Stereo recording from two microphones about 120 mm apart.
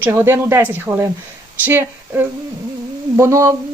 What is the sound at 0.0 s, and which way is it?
Speech, 15° right (ahead or behind).